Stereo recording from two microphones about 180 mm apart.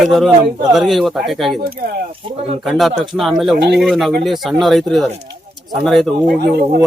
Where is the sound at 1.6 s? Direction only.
55° right (ahead or behind).